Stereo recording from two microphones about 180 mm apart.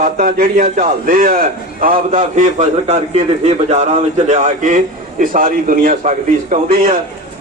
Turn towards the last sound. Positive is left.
turn(degrees=-45)  # may be behind; listen again after turning